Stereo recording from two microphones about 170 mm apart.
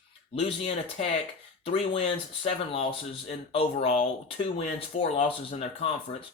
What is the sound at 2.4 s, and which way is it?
Speech, 35° left (ahead or behind).